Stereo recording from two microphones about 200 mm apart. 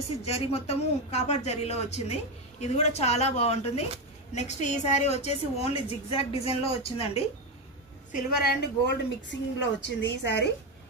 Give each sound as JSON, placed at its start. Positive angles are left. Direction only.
{"t": 0.2, "sound": "a woman's voice", "side_deg": 30}
{"t": 8.1, "sound": "a woman's voice", "side_deg": 50}